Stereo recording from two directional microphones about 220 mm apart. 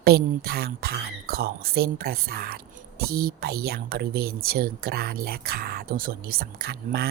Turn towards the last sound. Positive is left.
turn(degrees=-45)  # may be behind; listen again after turning